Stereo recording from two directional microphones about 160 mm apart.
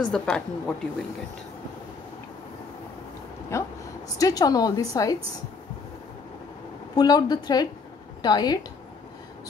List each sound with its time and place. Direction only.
0.0 s a woman's voice: 5° left (ahead or behind)
4.2 s a woman's voice: 25° left (ahead or behind)
7.0 s a woman's voice: 25° left (ahead or behind)